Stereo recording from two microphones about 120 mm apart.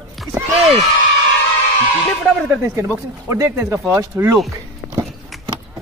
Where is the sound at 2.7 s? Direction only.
25° right (ahead or behind).